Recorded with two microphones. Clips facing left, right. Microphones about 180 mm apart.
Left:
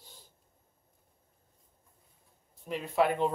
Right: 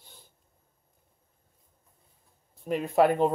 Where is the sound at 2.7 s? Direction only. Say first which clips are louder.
Right 5 dB; 45° right (ahead or behind).